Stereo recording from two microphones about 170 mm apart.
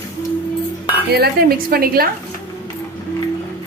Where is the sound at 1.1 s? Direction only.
65° right (ahead or behind).